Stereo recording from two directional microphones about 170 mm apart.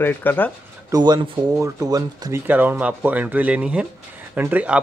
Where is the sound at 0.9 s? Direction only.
20° right (ahead or behind).